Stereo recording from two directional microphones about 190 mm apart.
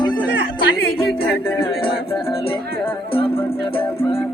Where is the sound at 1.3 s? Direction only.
10° left (ahead or behind).